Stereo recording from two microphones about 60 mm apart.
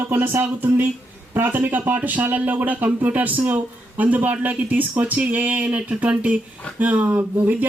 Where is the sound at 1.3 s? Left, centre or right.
Right.